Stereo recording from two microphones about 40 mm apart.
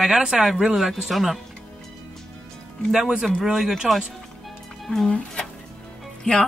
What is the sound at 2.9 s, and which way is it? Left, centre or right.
Speech, centre.